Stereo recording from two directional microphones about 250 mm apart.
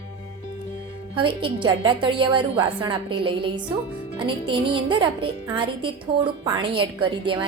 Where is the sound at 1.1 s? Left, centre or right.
Centre.